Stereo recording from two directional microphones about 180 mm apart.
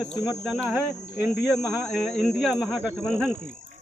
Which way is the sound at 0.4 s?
Centre (ahead or behind).